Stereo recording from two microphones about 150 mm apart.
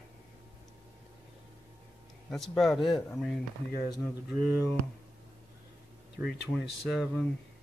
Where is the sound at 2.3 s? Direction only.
Centre (ahead or behind).